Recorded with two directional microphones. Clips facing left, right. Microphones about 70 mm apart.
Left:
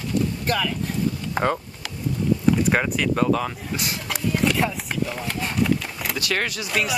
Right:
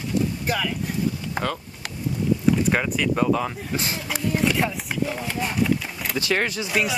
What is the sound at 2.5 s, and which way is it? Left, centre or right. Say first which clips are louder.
Speech: left 1 dB; centre.